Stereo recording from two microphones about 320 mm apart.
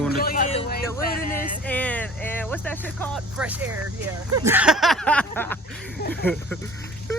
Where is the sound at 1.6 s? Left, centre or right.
Centre.